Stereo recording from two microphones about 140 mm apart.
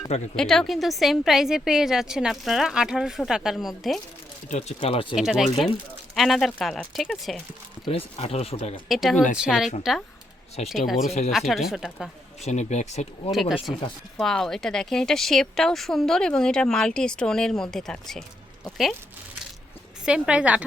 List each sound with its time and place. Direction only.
0.3 s speech: 5° left (ahead or behind)
4.8 s speech: 40° left (ahead or behind)
5.1 s speech: centre (ahead or behind)
7.9 s speech: 45° left (ahead or behind)
8.9 s speech: centre (ahead or behind)
12.5 s speech: 55° left (ahead or behind)
13.3 s speech: centre (ahead or behind)
20.1 s a woman's voice: 5° right (ahead or behind)